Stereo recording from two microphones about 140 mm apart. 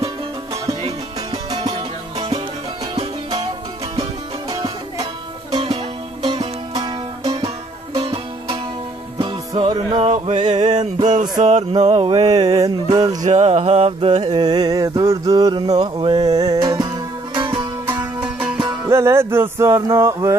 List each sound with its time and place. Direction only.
1.3 s music: 30° right (ahead or behind)
2.1 s music: 45° right (ahead or behind)
3.9 s music: 30° right (ahead or behind)
5.5 s music: 45° right (ahead or behind)
6.2 s music: 30° right (ahead or behind)
8.0 s music: 45° right (ahead or behind)
9.2 s music: 30° right (ahead or behind)
10.5 s music: 55° right (ahead or behind)
12.4 s mantra: 25° right (ahead or behind)
13.2 s music: 50° right (ahead or behind)
14.2 s a sound: 30° right (ahead or behind)
18.2 s music: 5° right (ahead or behind)
18.9 s a sound: 20° right (ahead or behind)